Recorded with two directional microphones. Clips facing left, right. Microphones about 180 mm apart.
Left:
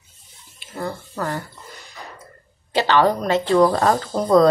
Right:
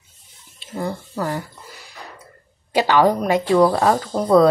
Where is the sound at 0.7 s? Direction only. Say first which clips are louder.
Right 2 dB; 10° right (ahead or behind).